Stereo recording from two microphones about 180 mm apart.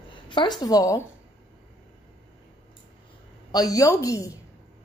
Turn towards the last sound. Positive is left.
turn(degrees=20)  # may be behind; listen again after turning